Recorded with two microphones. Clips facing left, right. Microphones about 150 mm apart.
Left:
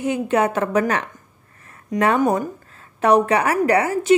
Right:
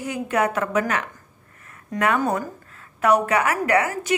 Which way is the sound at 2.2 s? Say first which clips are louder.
Left 5 dB; 20° left (ahead or behind).